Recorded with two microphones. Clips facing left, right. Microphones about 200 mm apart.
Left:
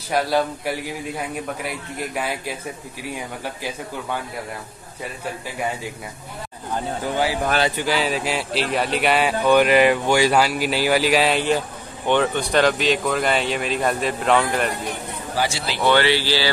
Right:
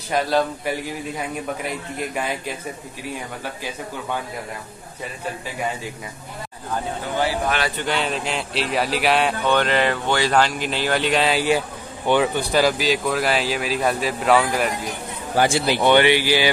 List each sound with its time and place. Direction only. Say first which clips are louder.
0.1 s a man's voice: even; 10° left (ahead or behind)
7.7 s speech: left 2 dB; 5° left (ahead or behind)
15.3 s speech: right 6 dB; 50° right (ahead or behind)
15.8 s speech: right 1 dB; 20° right (ahead or behind)